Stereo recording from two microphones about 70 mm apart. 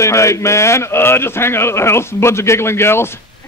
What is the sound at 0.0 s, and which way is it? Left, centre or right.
A man's voice, left.